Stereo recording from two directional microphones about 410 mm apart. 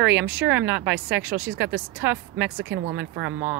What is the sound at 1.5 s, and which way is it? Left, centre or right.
Speech, right.